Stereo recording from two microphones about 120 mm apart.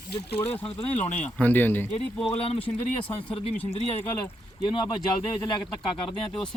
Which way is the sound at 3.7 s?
60° left (ahead or behind).